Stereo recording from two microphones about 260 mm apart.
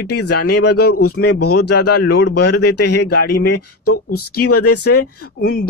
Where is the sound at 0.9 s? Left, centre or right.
Left.